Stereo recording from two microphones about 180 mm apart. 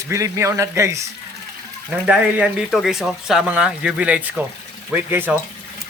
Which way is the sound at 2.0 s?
5° right (ahead or behind).